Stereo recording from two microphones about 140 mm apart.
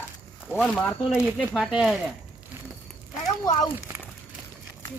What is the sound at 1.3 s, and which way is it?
Speech, 5° right (ahead or behind).